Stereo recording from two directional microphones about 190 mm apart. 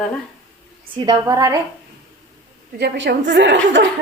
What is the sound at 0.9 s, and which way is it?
Speech, 15° right (ahead or behind).